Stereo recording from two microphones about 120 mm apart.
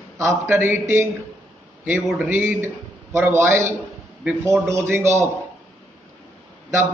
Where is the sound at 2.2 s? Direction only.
20° right (ahead or behind).